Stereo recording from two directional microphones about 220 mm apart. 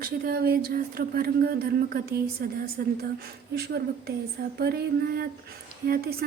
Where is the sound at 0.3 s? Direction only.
45° right (ahead or behind).